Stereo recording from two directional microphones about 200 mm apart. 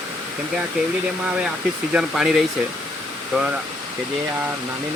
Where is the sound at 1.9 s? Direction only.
5° right (ahead or behind).